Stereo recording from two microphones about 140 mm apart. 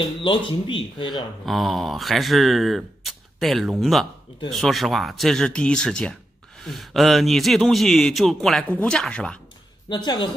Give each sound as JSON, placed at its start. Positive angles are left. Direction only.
{"t": 0.2, "sound": "speech", "side_deg": 35}
{"t": 1.4, "sound": "speech", "side_deg": 0}
{"t": 9.8, "sound": "speech", "side_deg": 30}